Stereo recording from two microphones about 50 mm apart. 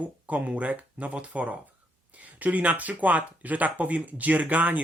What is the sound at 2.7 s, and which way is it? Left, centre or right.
Speech, right.